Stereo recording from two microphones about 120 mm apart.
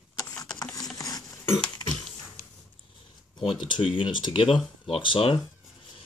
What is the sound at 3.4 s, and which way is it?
Speech, 45° left (ahead or behind).